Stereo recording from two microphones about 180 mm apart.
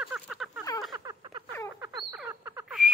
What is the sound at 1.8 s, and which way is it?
Bird, 15° right (ahead or behind).